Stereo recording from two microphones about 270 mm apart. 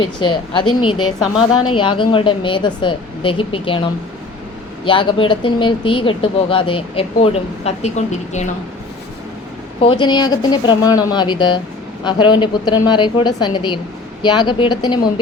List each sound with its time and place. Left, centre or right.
0.0 s speech: centre
4.9 s speech: centre
9.8 s speech: centre